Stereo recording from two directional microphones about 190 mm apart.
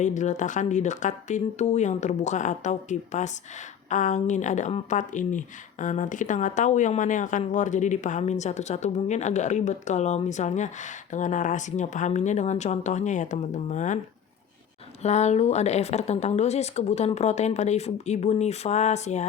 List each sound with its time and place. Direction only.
0.0 s speech: 40° left (ahead or behind)
15.0 s speech: 35° left (ahead or behind)